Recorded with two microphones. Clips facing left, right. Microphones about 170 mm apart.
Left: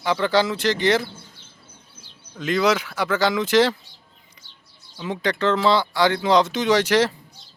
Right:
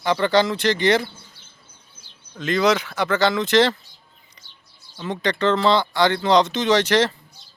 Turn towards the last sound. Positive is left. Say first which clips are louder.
# even
turn(degrees=10)  # may be behind; listen again after turning